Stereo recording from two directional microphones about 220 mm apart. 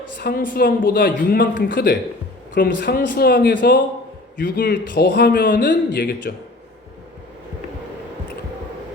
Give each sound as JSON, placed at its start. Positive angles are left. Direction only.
{"t": 0.2, "sound": "a man's voice", "side_deg": 45}